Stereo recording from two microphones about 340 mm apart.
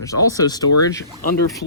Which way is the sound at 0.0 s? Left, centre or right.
Centre.